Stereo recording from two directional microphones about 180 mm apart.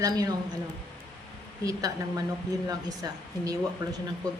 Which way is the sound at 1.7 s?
20° right (ahead or behind).